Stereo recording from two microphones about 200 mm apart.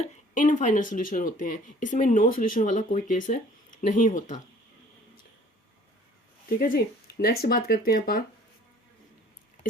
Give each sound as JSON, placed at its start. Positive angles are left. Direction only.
{"t": 0.0, "sound": "speech", "side_deg": 40}
{"t": 6.6, "sound": "speech", "side_deg": 50}